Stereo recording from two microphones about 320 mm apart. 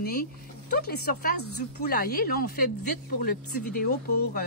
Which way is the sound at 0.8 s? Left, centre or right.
Left.